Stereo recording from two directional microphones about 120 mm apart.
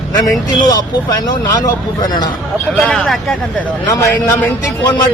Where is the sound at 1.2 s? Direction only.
35° left (ahead or behind).